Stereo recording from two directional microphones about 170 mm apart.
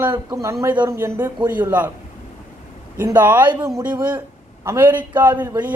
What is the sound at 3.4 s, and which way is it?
Speech, 25° right (ahead or behind).